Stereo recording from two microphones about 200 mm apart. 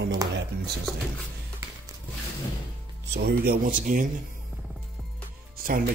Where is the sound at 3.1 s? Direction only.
50° right (ahead or behind).